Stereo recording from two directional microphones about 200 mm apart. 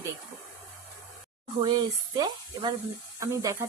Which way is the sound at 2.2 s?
20° right (ahead or behind).